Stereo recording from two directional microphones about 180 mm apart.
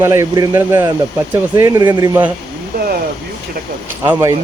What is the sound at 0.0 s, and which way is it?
Speech, 15° right (ahead or behind).